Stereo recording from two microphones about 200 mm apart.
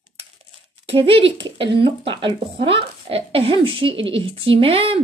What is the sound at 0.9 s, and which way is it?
A woman's voice, 25° right (ahead or behind).